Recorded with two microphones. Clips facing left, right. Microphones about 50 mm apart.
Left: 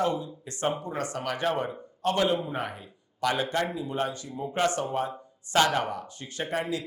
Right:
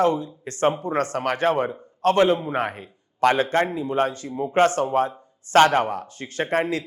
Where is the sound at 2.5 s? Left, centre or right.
Right.